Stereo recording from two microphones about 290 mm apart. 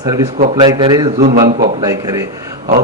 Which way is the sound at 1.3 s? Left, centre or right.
Right.